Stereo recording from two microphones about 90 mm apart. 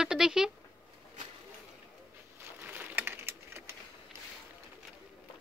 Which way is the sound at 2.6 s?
20° right (ahead or behind).